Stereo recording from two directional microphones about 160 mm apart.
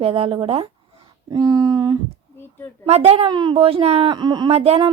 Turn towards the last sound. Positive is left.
turn(degrees=-40)  # may be behind; listen again after turning